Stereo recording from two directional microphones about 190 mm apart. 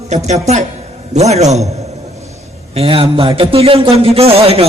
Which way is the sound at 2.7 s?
30° right (ahead or behind).